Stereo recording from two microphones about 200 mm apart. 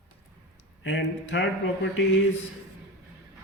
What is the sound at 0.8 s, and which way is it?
Speech, 65° left (ahead or behind).